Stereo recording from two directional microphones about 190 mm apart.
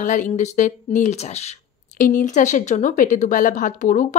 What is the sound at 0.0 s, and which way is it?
A woman's voice, 40° left (ahead or behind).